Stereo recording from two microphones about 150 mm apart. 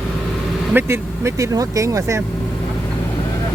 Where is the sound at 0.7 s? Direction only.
15° right (ahead or behind).